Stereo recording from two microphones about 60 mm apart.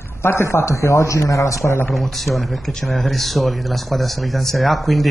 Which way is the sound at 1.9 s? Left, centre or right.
Centre.